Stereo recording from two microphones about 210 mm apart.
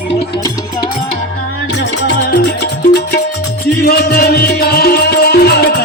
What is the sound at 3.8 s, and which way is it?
Music, 45° left (ahead or behind).